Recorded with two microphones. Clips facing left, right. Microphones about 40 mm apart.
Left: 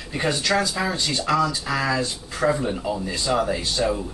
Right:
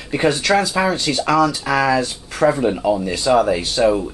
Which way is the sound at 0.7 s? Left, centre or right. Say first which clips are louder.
Right 6 dB; right.